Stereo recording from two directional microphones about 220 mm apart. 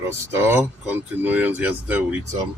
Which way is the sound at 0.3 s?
10° right (ahead or behind).